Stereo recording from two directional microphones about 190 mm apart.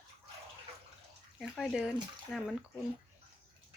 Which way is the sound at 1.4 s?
Centre (ahead or behind).